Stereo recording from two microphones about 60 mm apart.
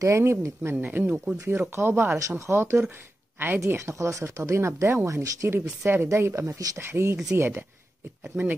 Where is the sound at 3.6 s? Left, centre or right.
Right.